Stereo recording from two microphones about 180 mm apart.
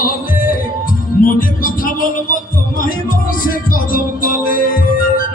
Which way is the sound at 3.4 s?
50° left (ahead or behind).